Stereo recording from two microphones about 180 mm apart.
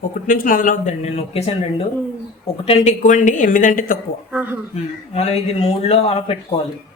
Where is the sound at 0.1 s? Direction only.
50° left (ahead or behind); by 1.5 s 35° left (ahead or behind).